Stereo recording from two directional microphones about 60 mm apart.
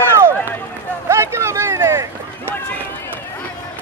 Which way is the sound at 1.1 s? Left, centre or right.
Right.